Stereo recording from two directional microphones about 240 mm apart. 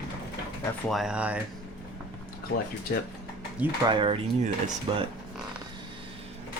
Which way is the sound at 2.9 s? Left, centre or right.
Left.